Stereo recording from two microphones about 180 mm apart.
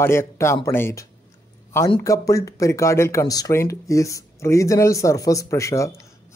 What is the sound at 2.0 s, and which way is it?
Speech, 20° left (ahead or behind).